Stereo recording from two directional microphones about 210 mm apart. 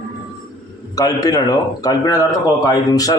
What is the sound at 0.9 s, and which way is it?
A man's voice, 15° left (ahead or behind).